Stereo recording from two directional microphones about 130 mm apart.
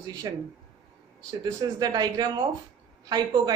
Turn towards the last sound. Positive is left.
turn(degrees=-30)  # may be behind; listen again after turning